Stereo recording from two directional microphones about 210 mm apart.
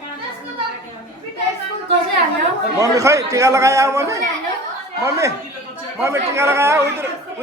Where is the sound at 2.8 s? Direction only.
15° right (ahead or behind).